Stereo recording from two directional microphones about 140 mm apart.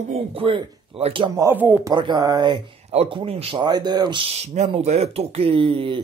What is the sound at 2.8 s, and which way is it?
A man's voice, 40° right (ahead or behind).